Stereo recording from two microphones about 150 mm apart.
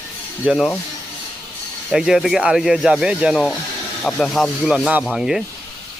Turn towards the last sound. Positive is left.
turn(degrees=-5)  # may be behind; listen again after turning